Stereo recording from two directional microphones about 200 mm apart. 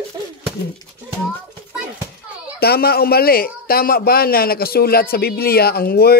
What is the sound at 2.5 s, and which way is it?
A man's voice, 50° left (ahead or behind).